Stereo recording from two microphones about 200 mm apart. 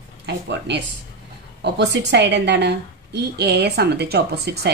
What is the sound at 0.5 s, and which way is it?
A woman's voice, 60° right (ahead or behind).